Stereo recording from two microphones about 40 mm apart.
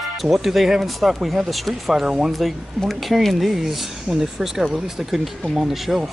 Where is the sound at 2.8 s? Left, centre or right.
Centre.